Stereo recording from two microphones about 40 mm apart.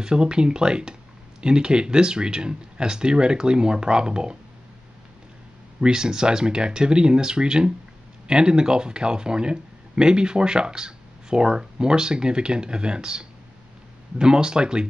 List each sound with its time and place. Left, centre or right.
0.0 s speech: right
5.8 s speech: right